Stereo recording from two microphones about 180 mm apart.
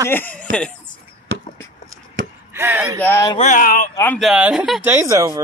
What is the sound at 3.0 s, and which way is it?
Speech, 10° left (ahead or behind).